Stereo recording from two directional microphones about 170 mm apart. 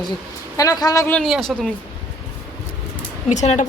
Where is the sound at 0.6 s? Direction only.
20° left (ahead or behind).